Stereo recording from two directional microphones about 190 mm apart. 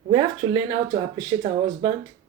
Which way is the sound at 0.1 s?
25° right (ahead or behind).